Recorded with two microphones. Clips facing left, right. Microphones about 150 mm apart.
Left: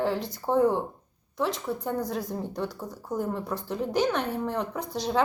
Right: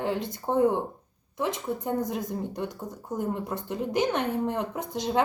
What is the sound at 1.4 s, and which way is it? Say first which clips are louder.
A woman's voice: even; 20° right (ahead or behind).